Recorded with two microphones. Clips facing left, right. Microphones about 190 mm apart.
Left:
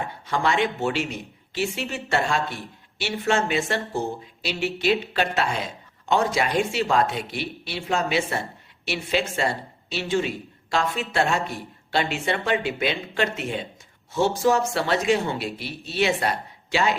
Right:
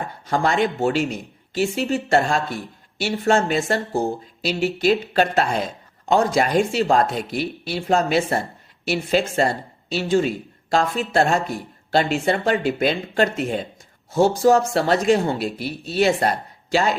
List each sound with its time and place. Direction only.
0.0 s speech: 40° right (ahead or behind)